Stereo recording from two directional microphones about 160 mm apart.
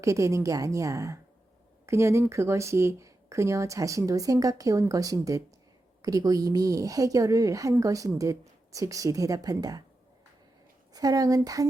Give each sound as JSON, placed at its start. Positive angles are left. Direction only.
{"t": 0.0, "sound": "a woman's voice", "side_deg": -20}
{"t": 10.9, "sound": "a woman's voice", "side_deg": -25}